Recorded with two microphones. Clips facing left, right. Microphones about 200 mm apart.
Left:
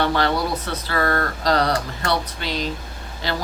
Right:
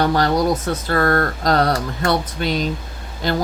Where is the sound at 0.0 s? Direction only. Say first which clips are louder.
Right 4 dB; 40° right (ahead or behind).